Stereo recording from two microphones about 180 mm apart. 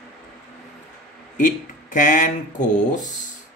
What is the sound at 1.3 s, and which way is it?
Speech, 45° left (ahead or behind).